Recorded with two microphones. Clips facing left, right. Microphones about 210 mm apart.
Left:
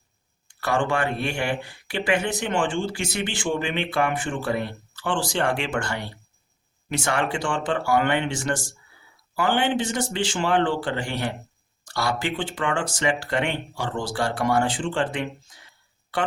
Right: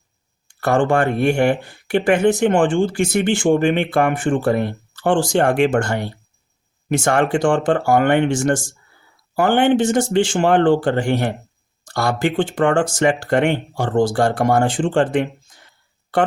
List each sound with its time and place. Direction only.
0.6 s speech: 50° right (ahead or behind)